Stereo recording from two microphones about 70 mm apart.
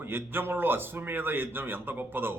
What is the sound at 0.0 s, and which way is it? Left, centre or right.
A man's voice, right.